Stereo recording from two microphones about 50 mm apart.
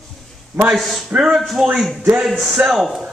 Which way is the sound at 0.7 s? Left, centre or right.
Centre.